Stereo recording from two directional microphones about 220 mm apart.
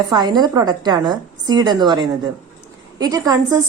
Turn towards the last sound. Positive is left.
turn(degrees=-15)  # may be behind; listen again after turning